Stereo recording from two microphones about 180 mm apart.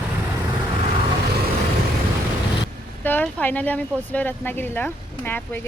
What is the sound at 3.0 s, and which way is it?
Speech, 10° left (ahead or behind).